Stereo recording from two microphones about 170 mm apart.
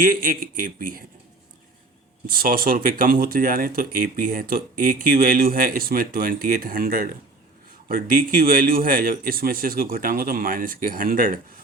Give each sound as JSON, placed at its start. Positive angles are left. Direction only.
{"t": 0.0, "sound": "speech", "side_deg": -55}
{"t": 2.2, "sound": "speech", "side_deg": -60}